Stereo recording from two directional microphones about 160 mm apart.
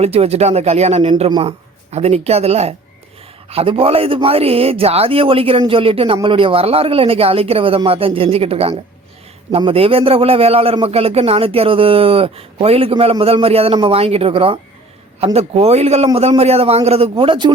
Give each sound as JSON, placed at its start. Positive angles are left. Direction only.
{"t": 0.0, "sound": "a man's voice", "side_deg": -40}